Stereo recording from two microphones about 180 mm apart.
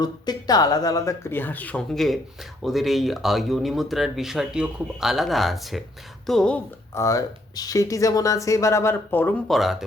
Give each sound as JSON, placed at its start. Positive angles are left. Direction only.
{"t": 0.0, "sound": "speech", "side_deg": 20}
{"t": 6.9, "sound": "speech", "side_deg": 15}